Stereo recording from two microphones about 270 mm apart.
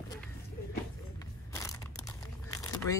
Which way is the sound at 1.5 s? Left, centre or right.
Centre.